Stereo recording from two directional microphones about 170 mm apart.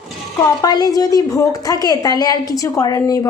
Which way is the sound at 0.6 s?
20° left (ahead or behind).